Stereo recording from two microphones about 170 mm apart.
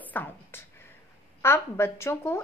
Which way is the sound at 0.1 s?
10° left (ahead or behind).